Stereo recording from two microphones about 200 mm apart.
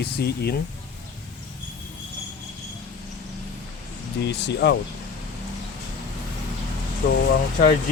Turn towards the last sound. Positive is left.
turn(degrees=40)  # may be behind; listen again after turning